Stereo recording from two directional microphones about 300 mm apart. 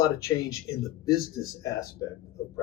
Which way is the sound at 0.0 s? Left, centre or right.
Centre.